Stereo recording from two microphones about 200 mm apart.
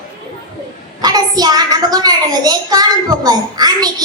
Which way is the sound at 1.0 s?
20° right (ahead or behind).